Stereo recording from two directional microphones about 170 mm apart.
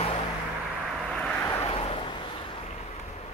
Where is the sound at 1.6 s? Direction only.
35° left (ahead or behind).